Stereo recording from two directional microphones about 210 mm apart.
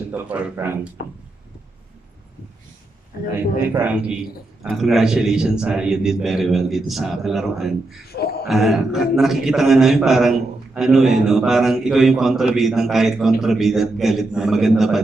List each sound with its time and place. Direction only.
0.1 s speech: 5° right (ahead or behind)
3.3 s a man's voice: 10° right (ahead or behind)